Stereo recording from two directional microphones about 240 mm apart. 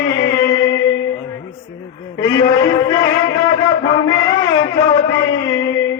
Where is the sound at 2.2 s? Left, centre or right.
Centre.